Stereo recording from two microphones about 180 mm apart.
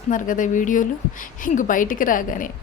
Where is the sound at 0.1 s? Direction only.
45° left (ahead or behind).